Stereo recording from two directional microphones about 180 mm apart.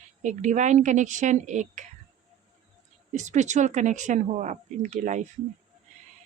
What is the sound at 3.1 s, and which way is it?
Speech, 40° right (ahead or behind).